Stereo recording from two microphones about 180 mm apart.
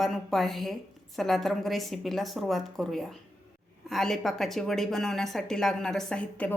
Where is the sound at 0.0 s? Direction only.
Centre (ahead or behind).